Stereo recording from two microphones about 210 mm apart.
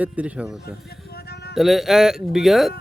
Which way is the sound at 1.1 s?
50° left (ahead or behind).